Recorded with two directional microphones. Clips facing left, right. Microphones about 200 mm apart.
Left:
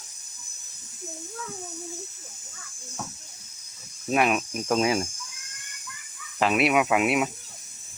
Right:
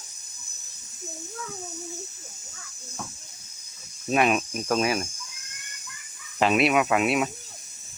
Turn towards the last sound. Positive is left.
turn(degrees=10)  # may be behind; listen again after turning